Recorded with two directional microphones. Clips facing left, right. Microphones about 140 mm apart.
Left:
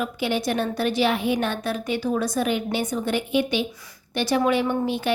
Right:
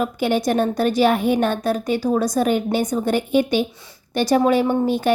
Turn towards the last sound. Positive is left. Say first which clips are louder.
# right 5 dB
turn(degrees=-45)  # may be behind; listen again after turning